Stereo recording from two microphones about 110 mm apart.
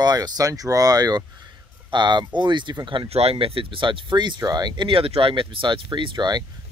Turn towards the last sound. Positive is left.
turn(degrees=-40)  # may be behind; listen again after turning